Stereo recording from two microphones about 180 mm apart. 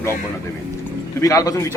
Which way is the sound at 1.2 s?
20° left (ahead or behind).